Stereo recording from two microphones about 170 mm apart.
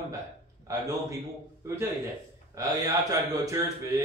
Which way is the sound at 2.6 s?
20° right (ahead or behind).